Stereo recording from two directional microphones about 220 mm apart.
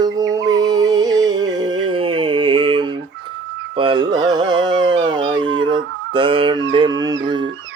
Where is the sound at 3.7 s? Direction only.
25° right (ahead or behind).